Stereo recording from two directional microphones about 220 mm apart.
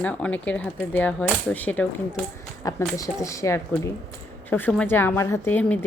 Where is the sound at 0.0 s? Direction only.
5° left (ahead or behind).